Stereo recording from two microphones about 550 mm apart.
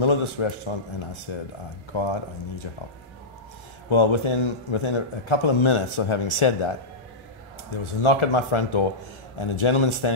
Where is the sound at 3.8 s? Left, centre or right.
Left.